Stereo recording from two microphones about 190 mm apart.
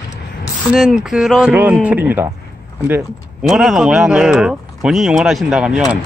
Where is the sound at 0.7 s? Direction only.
Centre (ahead or behind).